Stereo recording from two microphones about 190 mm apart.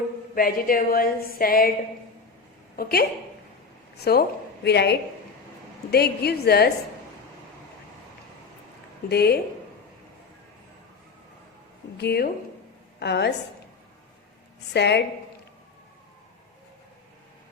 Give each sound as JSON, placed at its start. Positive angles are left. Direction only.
{"t": 0.3, "sound": "a woman's voice", "side_deg": 50}
{"t": 2.7, "sound": "a woman's voice", "side_deg": 50}
{"t": 9.0, "sound": "a woman's voice", "side_deg": 55}
{"t": 11.9, "sound": "a woman's voice", "side_deg": 55}
{"t": 14.7, "sound": "a woman's voice", "side_deg": 60}